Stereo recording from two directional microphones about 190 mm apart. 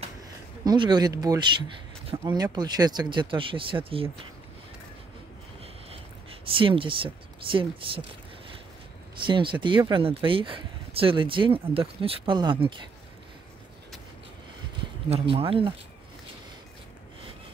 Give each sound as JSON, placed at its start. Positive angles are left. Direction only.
{"t": 0.7, "sound": "speech", "side_deg": -20}
{"t": 6.5, "sound": "speech", "side_deg": -30}
{"t": 9.2, "sound": "speech", "side_deg": -25}
{"t": 15.0, "sound": "speech", "side_deg": -30}